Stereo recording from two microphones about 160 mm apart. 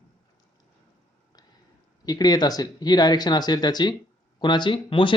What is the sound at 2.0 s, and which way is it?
Speech, 25° left (ahead or behind).